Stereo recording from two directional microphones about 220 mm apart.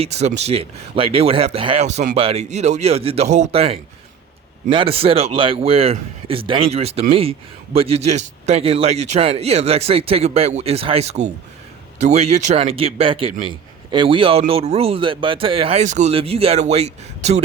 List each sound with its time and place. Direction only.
0.0 s a man's voice: 30° right (ahead or behind)